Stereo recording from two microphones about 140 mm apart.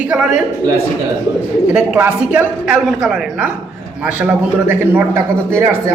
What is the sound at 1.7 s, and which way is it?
A man's voice, 10° right (ahead or behind).